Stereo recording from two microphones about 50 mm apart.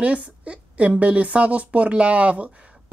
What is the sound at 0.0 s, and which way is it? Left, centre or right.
A woman's voice, right.